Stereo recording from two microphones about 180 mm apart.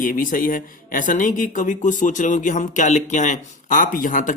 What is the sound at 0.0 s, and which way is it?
Speech, 50° left (ahead or behind).